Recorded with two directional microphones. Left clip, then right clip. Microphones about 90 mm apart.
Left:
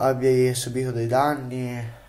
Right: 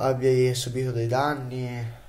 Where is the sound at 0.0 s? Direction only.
10° left (ahead or behind).